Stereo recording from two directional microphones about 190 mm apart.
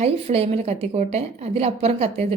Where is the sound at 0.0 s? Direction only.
35° right (ahead or behind).